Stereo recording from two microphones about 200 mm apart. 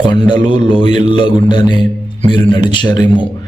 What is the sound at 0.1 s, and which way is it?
Speech, 25° left (ahead or behind).